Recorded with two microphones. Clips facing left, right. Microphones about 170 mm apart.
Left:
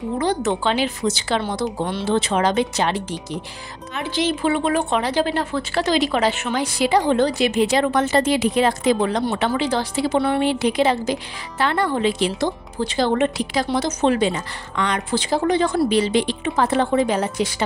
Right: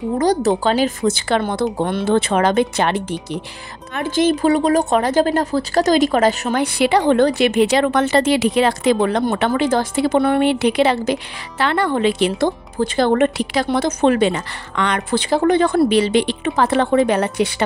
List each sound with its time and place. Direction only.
0.2 s speech: 40° right (ahead or behind); by 17.6 s 65° right (ahead or behind)